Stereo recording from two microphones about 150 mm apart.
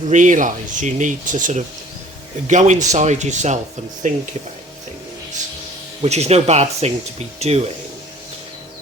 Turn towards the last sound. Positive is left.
turn(degrees=-45)  # may be behind; listen again after turning